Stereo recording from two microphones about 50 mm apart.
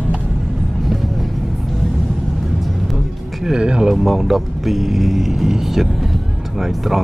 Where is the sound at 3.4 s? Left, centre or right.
Centre.